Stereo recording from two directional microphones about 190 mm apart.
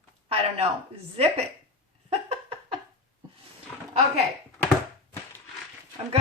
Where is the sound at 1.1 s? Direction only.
30° right (ahead or behind).